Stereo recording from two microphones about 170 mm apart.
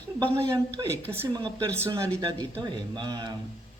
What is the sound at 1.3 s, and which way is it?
Speech, 25° right (ahead or behind).